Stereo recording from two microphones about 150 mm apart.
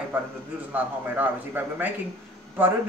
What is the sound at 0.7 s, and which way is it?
A woman's voice, 10° right (ahead or behind).